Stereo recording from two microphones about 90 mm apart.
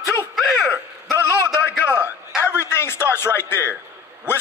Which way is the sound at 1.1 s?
35° right (ahead or behind).